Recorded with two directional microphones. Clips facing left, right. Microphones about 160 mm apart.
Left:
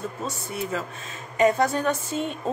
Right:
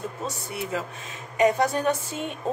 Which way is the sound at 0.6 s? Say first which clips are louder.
Left 1 dB; 10° right (ahead or behind).